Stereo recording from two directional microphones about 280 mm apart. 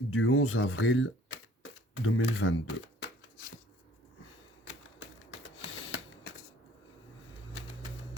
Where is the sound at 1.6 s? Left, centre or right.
Left.